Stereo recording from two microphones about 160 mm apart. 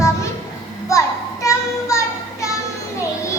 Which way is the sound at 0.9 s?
20° left (ahead or behind).